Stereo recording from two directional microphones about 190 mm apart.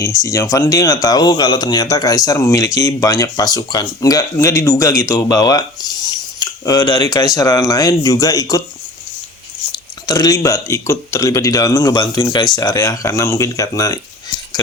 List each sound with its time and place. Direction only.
0.0 s speech: 15° left (ahead or behind)
10.1 s speech: 20° left (ahead or behind)